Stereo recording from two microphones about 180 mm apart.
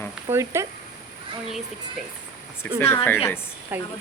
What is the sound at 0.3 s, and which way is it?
Speech, 15° right (ahead or behind).